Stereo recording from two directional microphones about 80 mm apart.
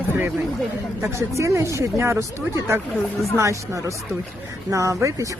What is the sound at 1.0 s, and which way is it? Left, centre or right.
Speech, right.